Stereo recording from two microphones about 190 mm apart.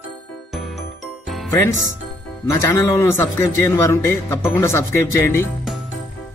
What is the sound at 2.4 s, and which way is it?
A man's voice, 15° left (ahead or behind).